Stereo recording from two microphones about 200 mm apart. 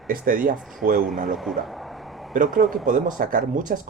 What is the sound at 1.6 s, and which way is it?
Speech, centre (ahead or behind).